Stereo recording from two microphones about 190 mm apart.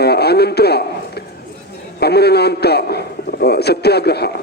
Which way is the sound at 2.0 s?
60° left (ahead or behind).